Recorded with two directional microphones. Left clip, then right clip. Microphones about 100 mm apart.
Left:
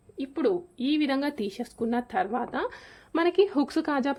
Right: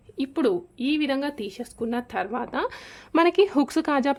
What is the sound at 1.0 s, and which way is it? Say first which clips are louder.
Speech: left 1 dB; centre (ahead or behind).